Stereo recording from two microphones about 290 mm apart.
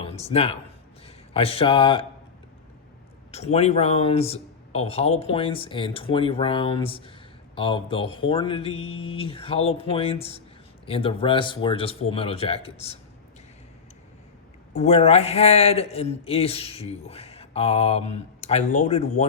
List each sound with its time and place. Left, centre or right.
0.0 s a man's voice: left
3.3 s a man's voice: left
14.8 s a man's voice: left